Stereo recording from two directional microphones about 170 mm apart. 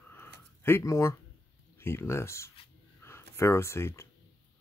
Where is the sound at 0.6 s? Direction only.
15° left (ahead or behind).